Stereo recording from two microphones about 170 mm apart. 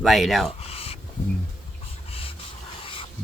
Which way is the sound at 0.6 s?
35° left (ahead or behind).